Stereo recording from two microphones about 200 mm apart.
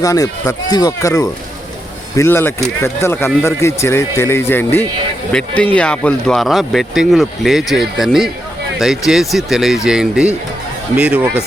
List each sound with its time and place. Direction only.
0.0 s speech: 15° left (ahead or behind); by 11.3 s 5° right (ahead or behind)